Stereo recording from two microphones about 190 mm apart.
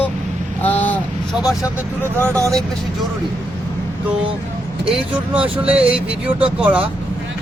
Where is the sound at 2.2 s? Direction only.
15° right (ahead or behind).